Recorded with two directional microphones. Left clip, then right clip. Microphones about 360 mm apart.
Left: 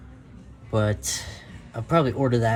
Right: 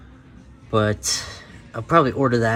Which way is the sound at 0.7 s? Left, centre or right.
Right.